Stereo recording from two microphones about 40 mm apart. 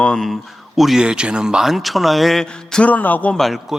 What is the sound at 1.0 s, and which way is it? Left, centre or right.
Speech, right.